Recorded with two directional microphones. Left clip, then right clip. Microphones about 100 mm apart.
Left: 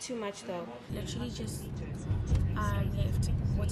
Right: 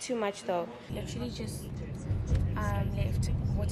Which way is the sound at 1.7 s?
15° right (ahead or behind).